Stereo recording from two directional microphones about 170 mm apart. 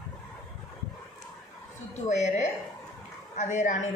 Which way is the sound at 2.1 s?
45° left (ahead or behind).